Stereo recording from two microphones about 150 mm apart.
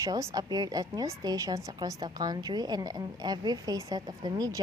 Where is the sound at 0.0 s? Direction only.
20° right (ahead or behind).